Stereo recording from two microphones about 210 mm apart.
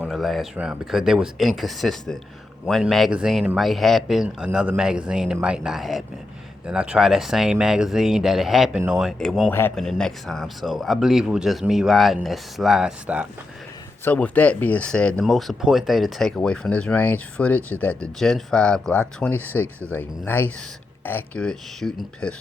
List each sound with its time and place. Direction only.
0.0 s speech: centre (ahead or behind)
14.0 s speech: 10° left (ahead or behind)